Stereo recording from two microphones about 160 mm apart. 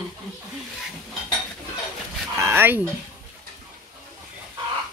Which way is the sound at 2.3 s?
15° right (ahead or behind).